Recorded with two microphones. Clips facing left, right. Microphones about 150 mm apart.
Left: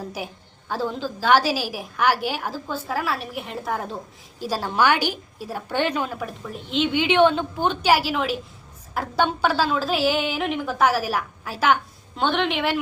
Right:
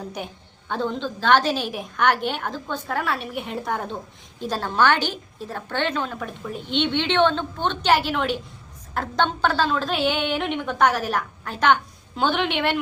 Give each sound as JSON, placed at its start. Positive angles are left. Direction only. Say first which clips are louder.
{"t": 0.0, "sound": "a woman's voice", "louder": "even", "side_deg": 5}